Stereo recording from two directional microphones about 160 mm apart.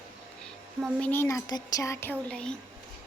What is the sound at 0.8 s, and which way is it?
Speech, 10° left (ahead or behind).